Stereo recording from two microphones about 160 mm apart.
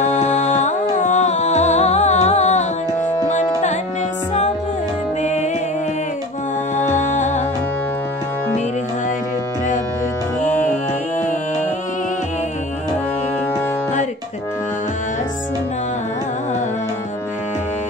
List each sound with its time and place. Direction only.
0.0 s music: 45° left (ahead or behind)
5.2 s music: 45° left (ahead or behind)
6.8 s music: 50° left (ahead or behind)